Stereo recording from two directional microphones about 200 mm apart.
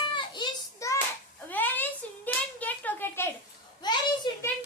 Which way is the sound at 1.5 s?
10° left (ahead or behind).